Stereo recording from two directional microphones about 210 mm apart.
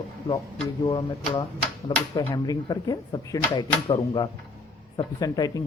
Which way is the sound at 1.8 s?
20° left (ahead or behind).